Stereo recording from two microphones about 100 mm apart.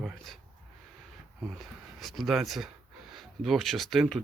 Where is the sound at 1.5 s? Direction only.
Centre (ahead or behind).